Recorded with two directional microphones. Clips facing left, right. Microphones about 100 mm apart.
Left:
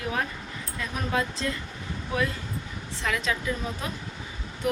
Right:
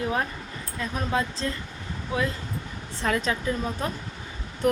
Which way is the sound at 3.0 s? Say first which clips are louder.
Right 3 dB; 40° right (ahead or behind).